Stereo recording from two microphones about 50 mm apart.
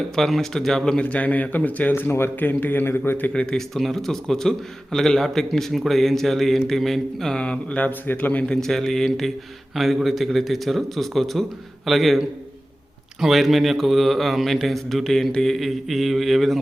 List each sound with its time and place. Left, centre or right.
0.2 s speech: centre
0.9 s a man's voice: left
2.0 s speech: left
2.4 s a man's voice: left
3.3 s a man's voice: centre
3.8 s a man's voice: centre
7.3 s a man's voice: centre
7.9 s a man's voice: left
8.6 s speech: centre